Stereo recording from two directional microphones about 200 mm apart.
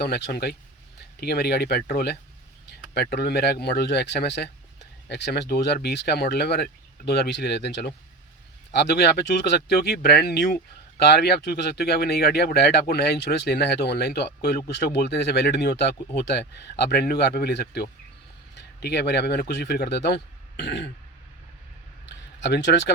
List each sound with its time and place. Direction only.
0.0 s speech: 50° left (ahead or behind)
22.4 s speech: 60° left (ahead or behind)